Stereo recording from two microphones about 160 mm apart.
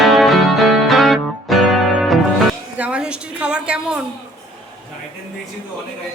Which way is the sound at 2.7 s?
10° right (ahead or behind).